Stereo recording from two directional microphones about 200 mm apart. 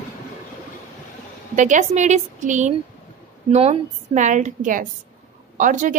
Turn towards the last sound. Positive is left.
turn(degrees=-40)  # may be behind; listen again after turning